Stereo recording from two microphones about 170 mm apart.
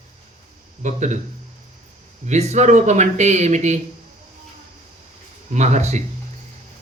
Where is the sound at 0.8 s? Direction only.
45° right (ahead or behind).